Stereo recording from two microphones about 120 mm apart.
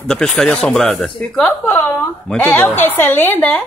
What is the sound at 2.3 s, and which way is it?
A man's voice, 15° left (ahead or behind).